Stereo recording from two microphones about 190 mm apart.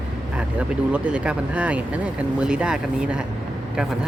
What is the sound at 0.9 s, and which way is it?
Speech, 5° right (ahead or behind).